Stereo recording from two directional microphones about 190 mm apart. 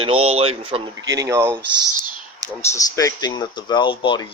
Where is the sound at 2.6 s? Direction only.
15° left (ahead or behind).